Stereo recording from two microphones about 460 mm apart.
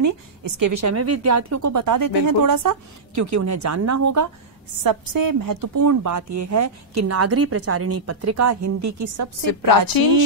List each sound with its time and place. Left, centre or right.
0.0 s a woman's voice: right
9.5 s a woman's voice: left